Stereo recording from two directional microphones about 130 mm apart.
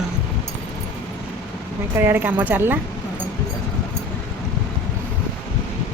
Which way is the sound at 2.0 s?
15° right (ahead or behind).